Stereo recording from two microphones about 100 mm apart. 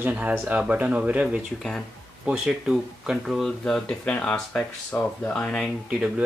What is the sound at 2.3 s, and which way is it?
Speech, 5° right (ahead or behind).